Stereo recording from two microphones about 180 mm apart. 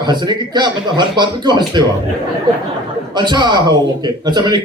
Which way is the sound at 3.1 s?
25° right (ahead or behind).